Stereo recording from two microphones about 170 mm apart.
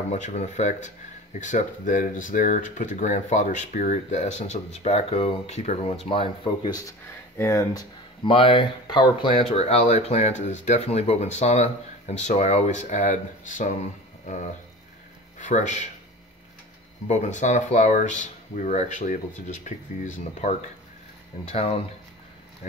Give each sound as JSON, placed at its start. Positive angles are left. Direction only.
{"t": 0.1, "sound": "speech", "side_deg": 45}
{"t": 17.1, "sound": "speech", "side_deg": 45}